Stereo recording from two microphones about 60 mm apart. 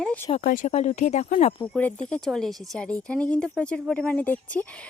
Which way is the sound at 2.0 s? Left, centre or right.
Centre.